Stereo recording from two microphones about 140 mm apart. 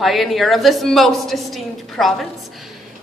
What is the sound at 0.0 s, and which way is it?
A woman's voice, centre (ahead or behind).